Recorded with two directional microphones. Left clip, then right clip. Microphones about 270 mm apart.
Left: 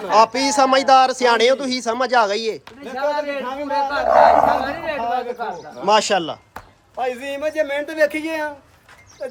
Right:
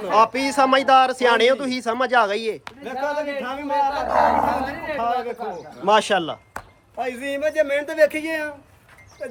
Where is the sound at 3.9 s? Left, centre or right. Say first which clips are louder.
Left 8 dB; left.